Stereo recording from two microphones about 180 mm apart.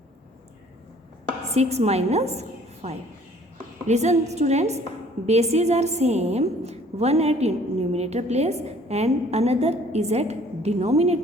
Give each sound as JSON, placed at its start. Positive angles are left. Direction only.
{"t": 1.5, "sound": "a woman's voice", "side_deg": -35}